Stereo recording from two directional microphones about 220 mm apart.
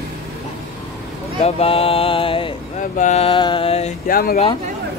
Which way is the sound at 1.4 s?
25° left (ahead or behind).